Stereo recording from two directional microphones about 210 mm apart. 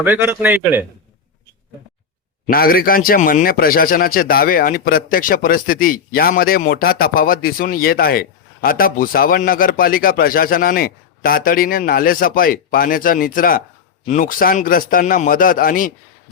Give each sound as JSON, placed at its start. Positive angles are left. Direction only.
{"t": 0.0, "sound": "a man's voice", "side_deg": -10}
{"t": 2.5, "sound": "a man's voice", "side_deg": 45}